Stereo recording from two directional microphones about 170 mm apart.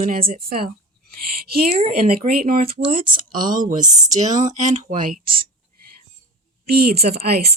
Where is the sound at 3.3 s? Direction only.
50° right (ahead or behind).